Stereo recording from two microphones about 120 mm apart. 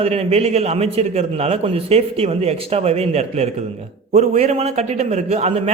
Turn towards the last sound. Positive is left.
turn(degrees=-60)  # may be behind; listen again after turning